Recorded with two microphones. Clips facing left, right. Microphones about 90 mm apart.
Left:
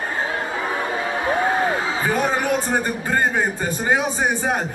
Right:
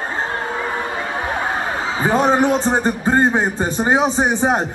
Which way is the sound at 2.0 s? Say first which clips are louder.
Right 8 dB; 25° right (ahead or behind).